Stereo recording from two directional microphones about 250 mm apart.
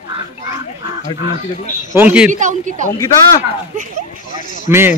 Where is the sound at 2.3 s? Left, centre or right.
Right.